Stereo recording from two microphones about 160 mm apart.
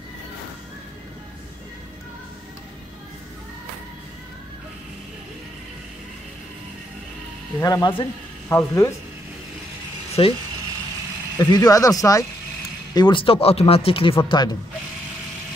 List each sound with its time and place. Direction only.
7.6 s speech: 25° left (ahead or behind)
10.2 s speech: 35° left (ahead or behind)
11.3 s speech: 25° left (ahead or behind)